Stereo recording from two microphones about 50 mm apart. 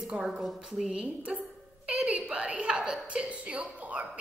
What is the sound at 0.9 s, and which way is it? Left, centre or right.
Speech, right.